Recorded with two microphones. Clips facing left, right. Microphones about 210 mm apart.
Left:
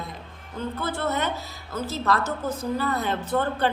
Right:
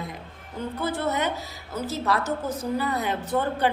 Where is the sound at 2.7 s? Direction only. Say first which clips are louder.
Even; 15° right (ahead or behind).